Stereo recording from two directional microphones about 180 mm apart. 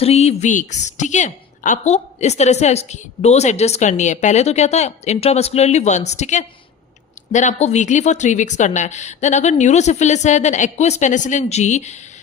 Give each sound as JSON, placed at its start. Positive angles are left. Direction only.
{"t": 0.0, "sound": "a woman's voice", "side_deg": 35}